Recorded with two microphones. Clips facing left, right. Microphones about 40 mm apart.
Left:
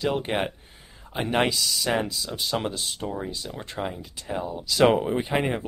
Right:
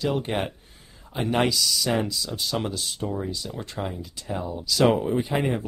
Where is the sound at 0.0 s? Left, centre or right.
Left.